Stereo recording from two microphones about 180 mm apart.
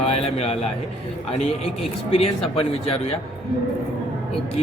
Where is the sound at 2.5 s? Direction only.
35° left (ahead or behind).